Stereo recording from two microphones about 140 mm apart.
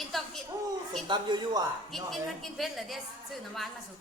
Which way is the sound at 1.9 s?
Centre (ahead or behind).